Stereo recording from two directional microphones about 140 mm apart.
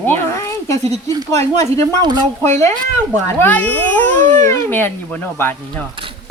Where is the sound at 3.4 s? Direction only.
10° left (ahead or behind).